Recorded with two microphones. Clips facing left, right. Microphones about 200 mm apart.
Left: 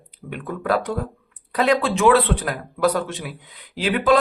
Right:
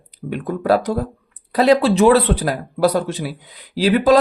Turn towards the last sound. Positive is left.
turn(degrees=-40)  # may be behind; listen again after turning